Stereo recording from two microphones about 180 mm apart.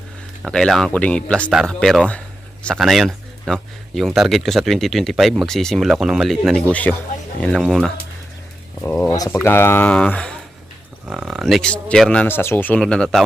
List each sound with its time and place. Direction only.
0.4 s speech: 5° left (ahead or behind)
9.0 s speech: 20° left (ahead or behind)